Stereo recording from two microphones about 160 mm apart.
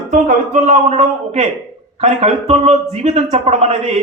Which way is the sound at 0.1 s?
50° right (ahead or behind).